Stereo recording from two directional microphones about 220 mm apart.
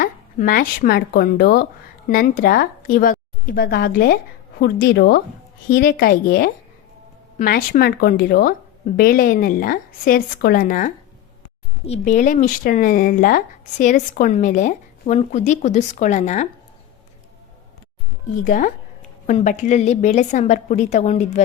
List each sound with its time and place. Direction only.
0.0 s a woman's voice: 40° left (ahead or behind)
18.4 s speech: 35° left (ahead or behind)